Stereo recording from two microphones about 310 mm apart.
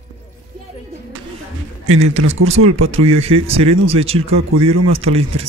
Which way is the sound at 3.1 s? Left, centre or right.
Centre.